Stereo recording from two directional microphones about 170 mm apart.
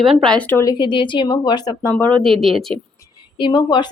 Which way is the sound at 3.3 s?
25° left (ahead or behind).